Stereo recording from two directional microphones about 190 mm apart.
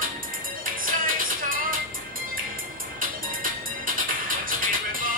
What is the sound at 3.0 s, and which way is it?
Music, 45° right (ahead or behind).